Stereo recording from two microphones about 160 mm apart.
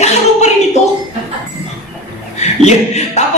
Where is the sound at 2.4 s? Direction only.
45° left (ahead or behind).